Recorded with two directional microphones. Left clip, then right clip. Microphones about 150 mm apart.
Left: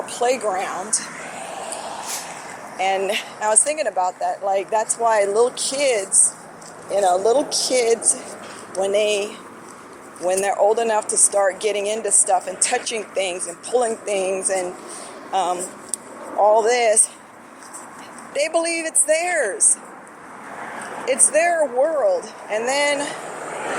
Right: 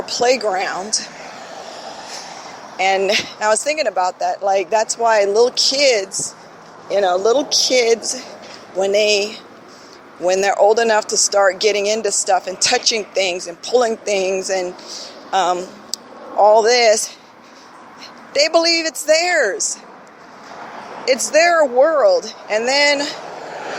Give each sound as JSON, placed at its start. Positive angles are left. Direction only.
{"t": 0.0, "sound": "speech", "side_deg": -55}
{"t": 2.7, "sound": "speech", "side_deg": -55}
{"t": 18.3, "sound": "speech", "side_deg": -50}
{"t": 21.0, "sound": "speech", "side_deg": -50}